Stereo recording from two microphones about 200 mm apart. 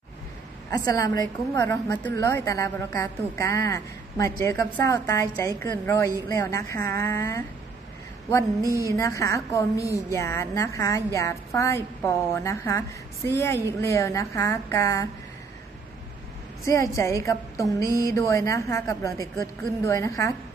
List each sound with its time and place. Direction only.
0.7 s a woman's voice: 15° left (ahead or behind)
8.7 s a woman's voice: 15° left (ahead or behind)
16.6 s a woman's voice: 15° left (ahead or behind)